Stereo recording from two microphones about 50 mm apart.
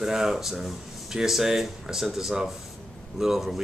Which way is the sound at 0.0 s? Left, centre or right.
Centre.